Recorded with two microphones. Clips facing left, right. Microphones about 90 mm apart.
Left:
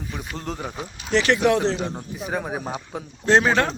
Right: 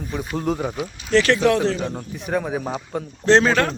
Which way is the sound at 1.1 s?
15° left (ahead or behind).